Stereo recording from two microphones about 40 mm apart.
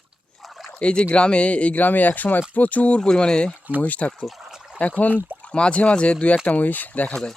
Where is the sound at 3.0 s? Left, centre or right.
Centre.